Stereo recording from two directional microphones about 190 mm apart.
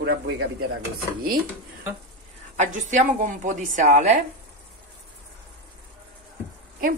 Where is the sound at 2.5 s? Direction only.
40° right (ahead or behind).